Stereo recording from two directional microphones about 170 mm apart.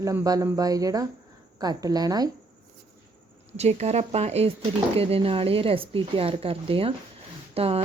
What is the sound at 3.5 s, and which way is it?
Speech, 40° right (ahead or behind).